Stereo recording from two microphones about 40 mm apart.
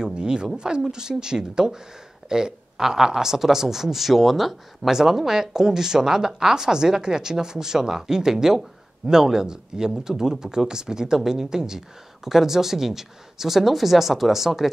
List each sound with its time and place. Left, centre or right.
0.0 s speech: right; by 14.7 s centre